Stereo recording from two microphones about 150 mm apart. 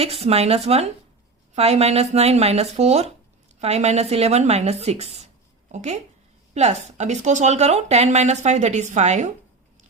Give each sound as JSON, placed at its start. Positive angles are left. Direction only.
{"t": 0.0, "sound": "speech", "side_deg": -40}